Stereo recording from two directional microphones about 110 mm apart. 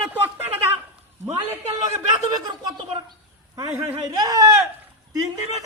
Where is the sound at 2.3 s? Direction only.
35° right (ahead or behind).